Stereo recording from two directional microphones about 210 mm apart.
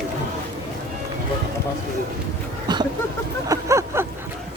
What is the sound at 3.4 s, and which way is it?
Speech, 15° right (ahead or behind).